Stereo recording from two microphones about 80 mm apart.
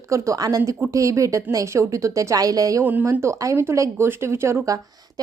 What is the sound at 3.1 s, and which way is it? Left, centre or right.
A woman's voice, right.